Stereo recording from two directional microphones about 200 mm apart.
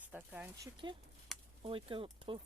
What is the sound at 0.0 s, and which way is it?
Speech, 10° right (ahead or behind).